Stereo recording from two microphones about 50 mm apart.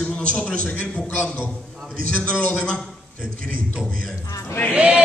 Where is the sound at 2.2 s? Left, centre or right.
Left.